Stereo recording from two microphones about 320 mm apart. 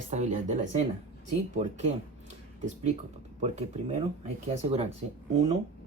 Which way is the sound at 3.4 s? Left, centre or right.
Right.